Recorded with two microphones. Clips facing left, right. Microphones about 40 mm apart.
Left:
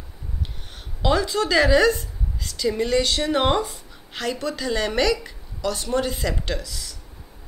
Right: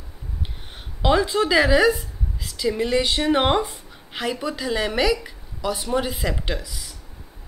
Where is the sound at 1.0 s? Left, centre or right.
Centre.